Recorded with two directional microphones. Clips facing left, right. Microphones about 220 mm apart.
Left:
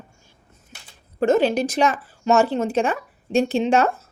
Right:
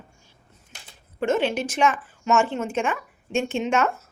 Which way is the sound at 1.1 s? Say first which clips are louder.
Left 5 dB; 40° left (ahead or behind).